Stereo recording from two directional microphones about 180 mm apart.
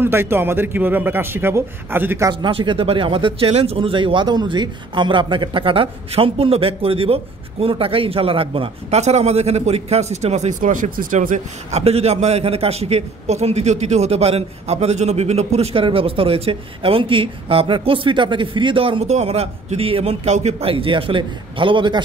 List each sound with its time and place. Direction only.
0.0 s a man's voice: 15° right (ahead or behind)
2.4 s a man's voice: 25° right (ahead or behind)